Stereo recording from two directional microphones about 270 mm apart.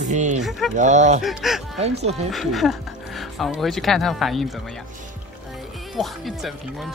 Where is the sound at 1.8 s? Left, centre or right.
Right.